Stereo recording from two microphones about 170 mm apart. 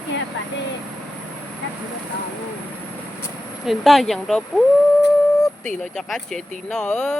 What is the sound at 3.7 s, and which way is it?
Speech, centre (ahead or behind).